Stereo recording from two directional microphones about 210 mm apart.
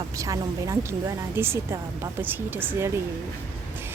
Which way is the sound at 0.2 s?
15° right (ahead or behind).